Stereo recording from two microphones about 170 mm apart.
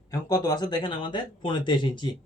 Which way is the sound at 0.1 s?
20° left (ahead or behind).